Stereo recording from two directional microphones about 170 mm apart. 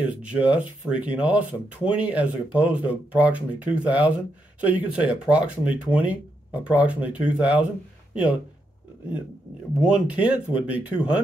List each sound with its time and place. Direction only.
0.0 s speech: 10° right (ahead or behind)
9.8 s speech: 5° right (ahead or behind)